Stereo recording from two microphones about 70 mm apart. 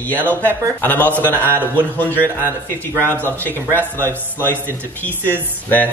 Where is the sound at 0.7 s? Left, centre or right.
Left.